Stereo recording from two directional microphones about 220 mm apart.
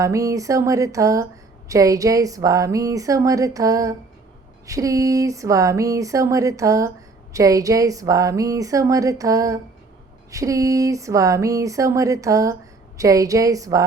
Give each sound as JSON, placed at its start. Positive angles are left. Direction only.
{"t": 0.0, "sound": "speech", "side_deg": -15}